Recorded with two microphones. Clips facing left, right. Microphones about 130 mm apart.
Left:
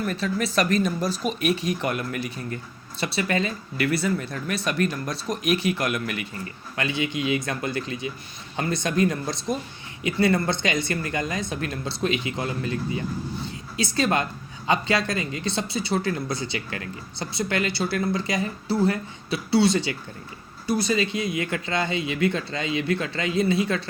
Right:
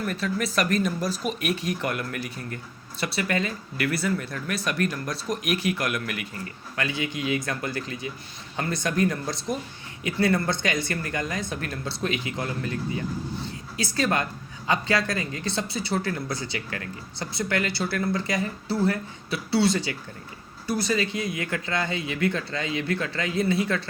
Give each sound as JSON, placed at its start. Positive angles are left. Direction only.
{"t": 0.1, "sound": "speech", "side_deg": 25}
{"t": 13.7, "sound": "speech", "side_deg": 25}